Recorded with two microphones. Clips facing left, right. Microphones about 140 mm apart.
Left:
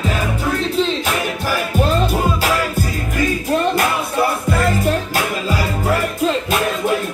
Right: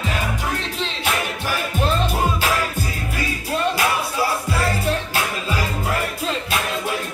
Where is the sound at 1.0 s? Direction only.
40° left (ahead or behind).